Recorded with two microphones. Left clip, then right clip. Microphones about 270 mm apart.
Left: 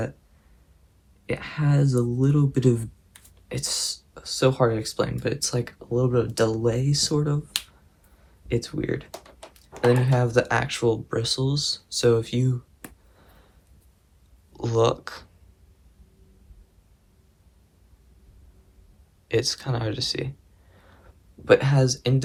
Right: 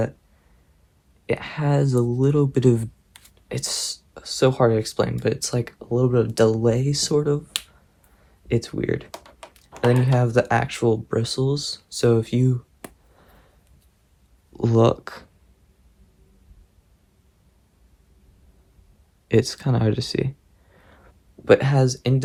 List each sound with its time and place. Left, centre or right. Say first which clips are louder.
1.3 s speech: right 5 dB; right
10.1 s speech: right 2 dB; right
14.5 s speech: right 3 dB; right
19.3 s speech: right 4 dB; right
20.7 s a sound: right 3 dB; right
21.4 s speech: right 2 dB; right